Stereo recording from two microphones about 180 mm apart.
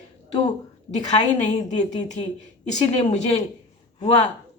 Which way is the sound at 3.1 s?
35° left (ahead or behind).